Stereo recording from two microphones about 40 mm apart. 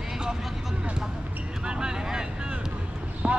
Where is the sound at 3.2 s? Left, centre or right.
Right.